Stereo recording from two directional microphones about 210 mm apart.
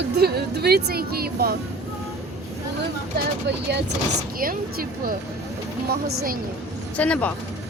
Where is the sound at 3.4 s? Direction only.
55° right (ahead or behind).